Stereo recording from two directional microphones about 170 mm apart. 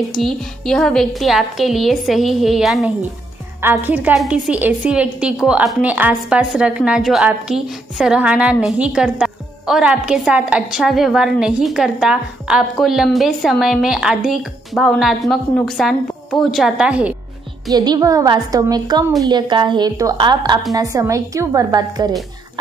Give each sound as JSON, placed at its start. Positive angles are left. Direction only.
{"t": 0.1, "sound": "a woman's voice", "side_deg": 0}
{"t": 3.6, "sound": "a woman's voice", "side_deg": -10}
{"t": 17.6, "sound": "a woman's voice", "side_deg": -20}